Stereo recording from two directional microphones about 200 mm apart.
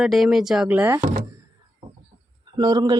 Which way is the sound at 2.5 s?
20° right (ahead or behind).